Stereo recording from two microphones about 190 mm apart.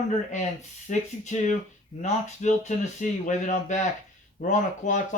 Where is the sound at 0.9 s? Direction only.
40° left (ahead or behind).